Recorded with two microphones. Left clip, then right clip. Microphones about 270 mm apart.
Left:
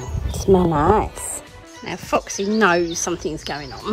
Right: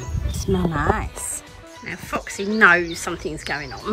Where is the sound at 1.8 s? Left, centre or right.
Centre.